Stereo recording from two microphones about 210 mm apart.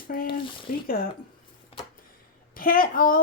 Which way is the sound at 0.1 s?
40° left (ahead or behind).